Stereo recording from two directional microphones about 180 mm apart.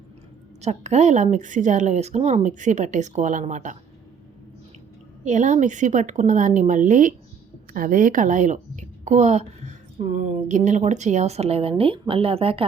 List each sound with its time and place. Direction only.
0.6 s a woman's voice: 40° right (ahead or behind)
5.2 s a woman's voice: 45° right (ahead or behind)